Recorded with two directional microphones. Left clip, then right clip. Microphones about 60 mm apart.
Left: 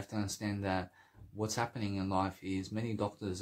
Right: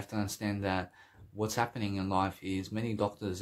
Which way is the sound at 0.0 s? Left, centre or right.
Right.